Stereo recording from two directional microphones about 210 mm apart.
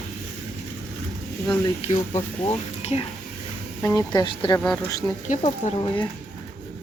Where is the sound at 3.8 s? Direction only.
15° left (ahead or behind).